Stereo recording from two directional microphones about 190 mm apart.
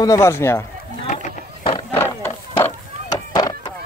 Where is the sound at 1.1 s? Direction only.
40° left (ahead or behind).